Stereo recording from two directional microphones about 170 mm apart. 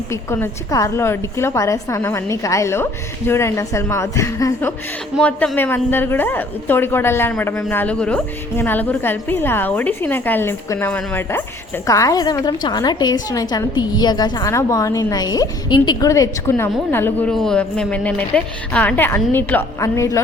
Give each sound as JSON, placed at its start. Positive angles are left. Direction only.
{"t": 0.1, "sound": "a woman's voice", "side_deg": 15}
{"t": 5.1, "sound": "a woman's voice", "side_deg": 5}